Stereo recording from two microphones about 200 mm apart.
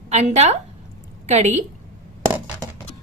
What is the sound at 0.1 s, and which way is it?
A woman's voice, 35° right (ahead or behind).